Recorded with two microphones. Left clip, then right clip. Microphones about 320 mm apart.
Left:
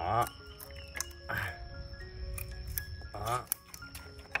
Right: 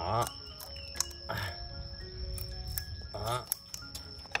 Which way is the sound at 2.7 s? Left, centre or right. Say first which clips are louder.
Left 1 dB; centre.